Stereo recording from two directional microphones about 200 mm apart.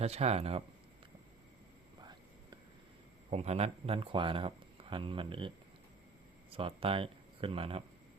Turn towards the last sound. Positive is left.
turn(degrees=-25)  # may be behind; listen again after turning